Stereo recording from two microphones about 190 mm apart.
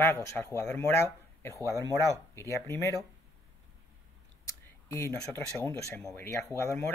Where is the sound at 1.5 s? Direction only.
15° right (ahead or behind).